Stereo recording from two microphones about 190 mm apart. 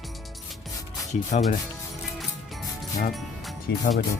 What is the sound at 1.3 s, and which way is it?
Speech, 40° left (ahead or behind).